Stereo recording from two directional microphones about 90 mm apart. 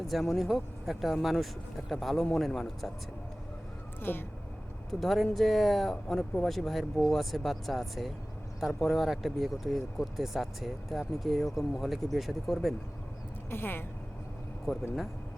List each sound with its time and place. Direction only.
0.0 s speech: centre (ahead or behind)
4.0 s speech: 25° left (ahead or behind)
4.9 s speech: centre (ahead or behind)
13.5 s speech: 25° left (ahead or behind)